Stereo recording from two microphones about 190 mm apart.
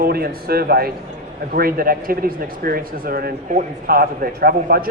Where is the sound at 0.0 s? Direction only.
55° right (ahead or behind).